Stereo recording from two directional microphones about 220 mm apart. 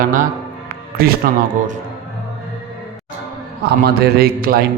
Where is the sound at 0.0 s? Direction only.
40° right (ahead or behind).